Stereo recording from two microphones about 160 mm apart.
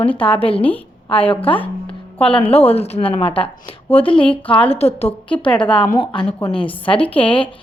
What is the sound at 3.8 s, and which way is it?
Speech, 10° left (ahead or behind).